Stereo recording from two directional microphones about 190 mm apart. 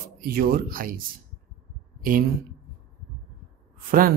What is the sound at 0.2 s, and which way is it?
Speech, 50° right (ahead or behind).